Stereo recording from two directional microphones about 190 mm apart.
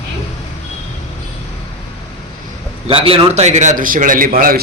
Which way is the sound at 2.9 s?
30° right (ahead or behind).